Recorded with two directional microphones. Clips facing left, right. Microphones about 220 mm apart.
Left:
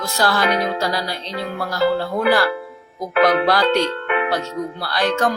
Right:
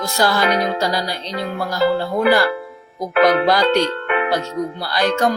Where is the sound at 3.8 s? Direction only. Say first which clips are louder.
Right 1 dB; 40° right (ahead or behind).